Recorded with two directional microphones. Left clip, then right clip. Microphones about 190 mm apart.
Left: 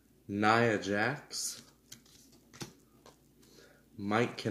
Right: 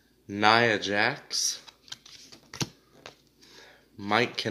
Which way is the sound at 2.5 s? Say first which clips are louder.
Right 13 dB; 30° right (ahead or behind).